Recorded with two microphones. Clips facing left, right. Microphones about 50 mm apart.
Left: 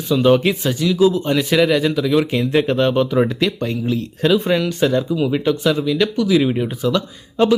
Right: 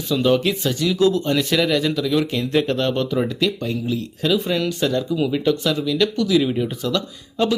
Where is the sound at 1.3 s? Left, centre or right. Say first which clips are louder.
Left 3 dB; centre.